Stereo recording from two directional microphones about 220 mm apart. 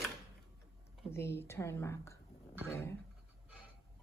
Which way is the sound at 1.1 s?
10° left (ahead or behind).